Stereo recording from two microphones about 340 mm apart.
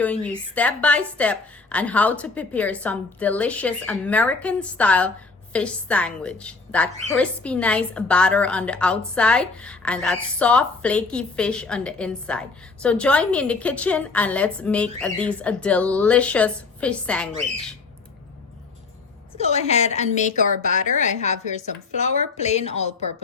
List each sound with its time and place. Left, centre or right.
0.0 s a woman's voice: centre
19.4 s a woman's voice: centre